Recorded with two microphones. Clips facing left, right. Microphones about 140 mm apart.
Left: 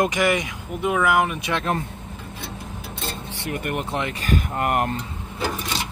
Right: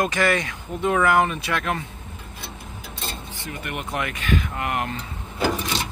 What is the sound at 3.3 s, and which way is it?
Vehicle, 65° left (ahead or behind).